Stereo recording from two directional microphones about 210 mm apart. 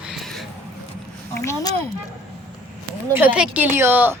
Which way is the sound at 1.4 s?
15° left (ahead or behind).